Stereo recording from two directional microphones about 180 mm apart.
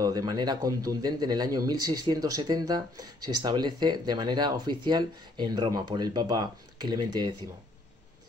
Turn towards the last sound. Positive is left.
turn(degrees=-25)  # may be behind; listen again after turning